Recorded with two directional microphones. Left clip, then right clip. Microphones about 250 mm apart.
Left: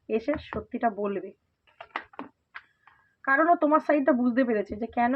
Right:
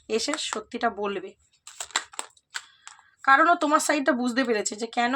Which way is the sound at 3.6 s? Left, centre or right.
Centre.